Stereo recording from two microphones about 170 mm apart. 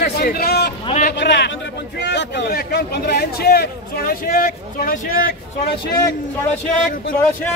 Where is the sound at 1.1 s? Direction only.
85° left; by 5.2 s 55° left (ahead or behind).